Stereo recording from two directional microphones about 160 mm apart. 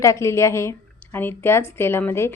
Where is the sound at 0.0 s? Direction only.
20° left (ahead or behind).